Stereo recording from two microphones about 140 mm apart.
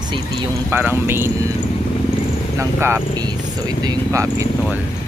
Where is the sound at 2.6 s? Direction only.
20° right (ahead or behind).